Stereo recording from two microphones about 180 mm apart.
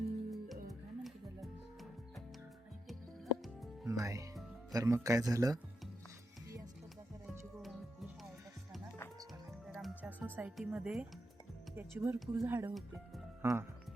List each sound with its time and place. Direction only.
0.3 s music: centre (ahead or behind)
3.8 s speech: 20° right (ahead or behind)
7.3 s music: 5° right (ahead or behind)
9.6 s music: 5° right (ahead or behind)
10.3 s speech: 5° right (ahead or behind)